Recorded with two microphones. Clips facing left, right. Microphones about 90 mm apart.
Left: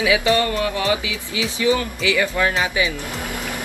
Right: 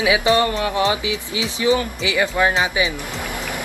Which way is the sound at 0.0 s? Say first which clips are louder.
Right 1 dB; 25° right (ahead or behind).